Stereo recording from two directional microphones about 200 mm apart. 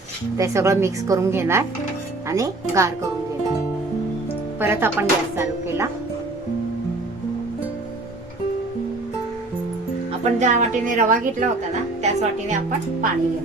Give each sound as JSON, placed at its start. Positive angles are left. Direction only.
{"t": 0.3, "sound": "speech", "side_deg": -15}
{"t": 4.6, "sound": "speech", "side_deg": -10}
{"t": 10.4, "sound": "a woman's voice", "side_deg": -40}